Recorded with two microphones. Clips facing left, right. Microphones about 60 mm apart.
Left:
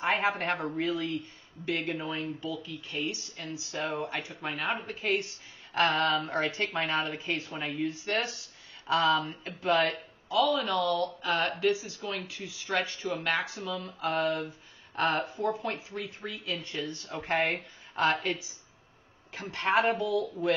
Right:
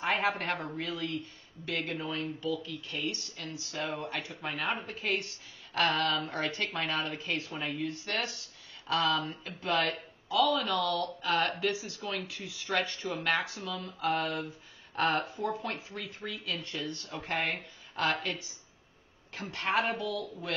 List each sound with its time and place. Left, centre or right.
0.0 s speech: centre
5.7 s speech: left
7.1 s speech: centre
7.8 s speech: centre
17.3 s speech: left
19.3 s speech: centre
19.9 s speech: centre